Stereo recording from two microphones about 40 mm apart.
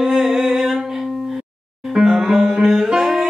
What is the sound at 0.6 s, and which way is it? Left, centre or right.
Music, centre.